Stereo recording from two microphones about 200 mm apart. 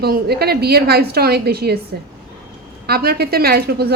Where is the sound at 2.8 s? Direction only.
50° right (ahead or behind).